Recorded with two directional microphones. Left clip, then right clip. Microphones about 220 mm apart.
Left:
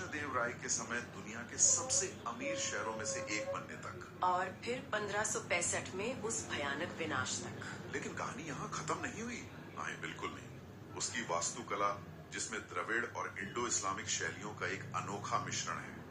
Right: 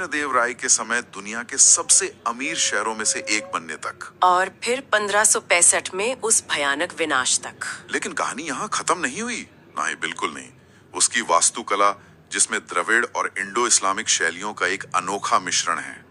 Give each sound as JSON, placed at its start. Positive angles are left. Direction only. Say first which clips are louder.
{"t": 0.1, "sound": "speech", "louder": "right 16 dB", "side_deg": -50}